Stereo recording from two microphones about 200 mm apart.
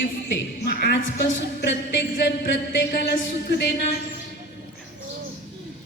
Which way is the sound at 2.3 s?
55° left (ahead or behind).